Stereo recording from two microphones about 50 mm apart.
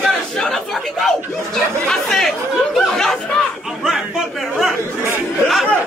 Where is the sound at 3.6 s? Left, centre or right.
Centre.